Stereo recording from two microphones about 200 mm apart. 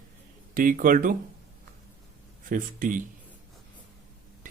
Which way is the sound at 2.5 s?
40° right (ahead or behind).